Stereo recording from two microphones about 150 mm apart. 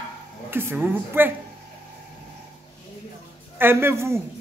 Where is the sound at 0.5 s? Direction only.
15° right (ahead or behind).